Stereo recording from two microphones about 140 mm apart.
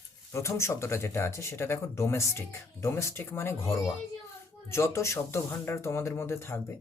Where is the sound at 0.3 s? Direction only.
20° left (ahead or behind).